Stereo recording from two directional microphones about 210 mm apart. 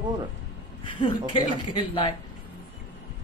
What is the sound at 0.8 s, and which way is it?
Speech, 25° left (ahead or behind).